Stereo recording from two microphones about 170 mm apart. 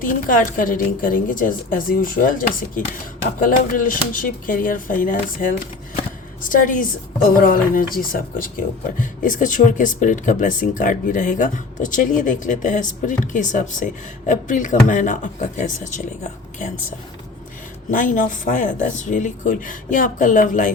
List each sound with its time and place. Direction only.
0.0 s speech: 55° left (ahead or behind)
3.4 s speech: 55° left (ahead or behind)
17.9 s speech: 50° left (ahead or behind)